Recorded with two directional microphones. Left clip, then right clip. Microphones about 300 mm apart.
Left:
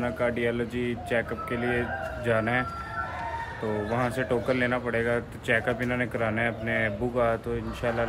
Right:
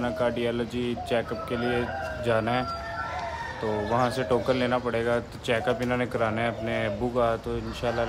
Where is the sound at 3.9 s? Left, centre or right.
Centre.